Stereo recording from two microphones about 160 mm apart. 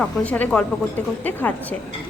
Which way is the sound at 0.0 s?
10° left (ahead or behind).